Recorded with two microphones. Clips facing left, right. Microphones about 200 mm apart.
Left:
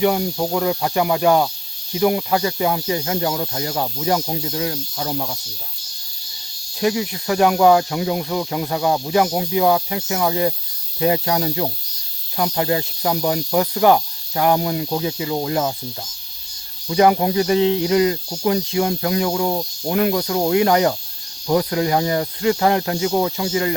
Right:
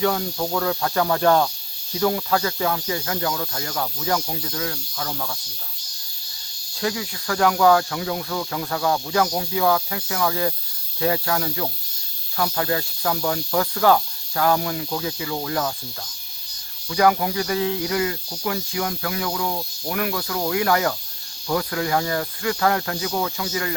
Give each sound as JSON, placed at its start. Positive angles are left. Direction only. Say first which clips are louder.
{"t": 0.0, "sound": "snake", "louder": "left 4 dB", "side_deg": 20}
{"t": 1.9, "sound": "speech", "louder": "left 3 dB", "side_deg": 20}
{"t": 6.7, "sound": "speech", "louder": "left 6 dB", "side_deg": 20}
{"t": 16.9, "sound": "speech", "louder": "left 4 dB", "side_deg": 25}